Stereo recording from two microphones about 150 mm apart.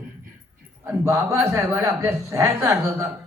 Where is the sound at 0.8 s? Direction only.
20° right (ahead or behind).